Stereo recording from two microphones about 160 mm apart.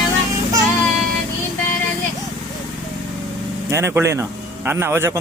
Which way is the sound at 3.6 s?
15° right (ahead or behind).